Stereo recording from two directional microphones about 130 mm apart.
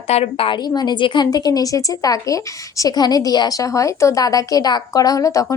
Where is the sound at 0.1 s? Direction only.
50° left (ahead or behind).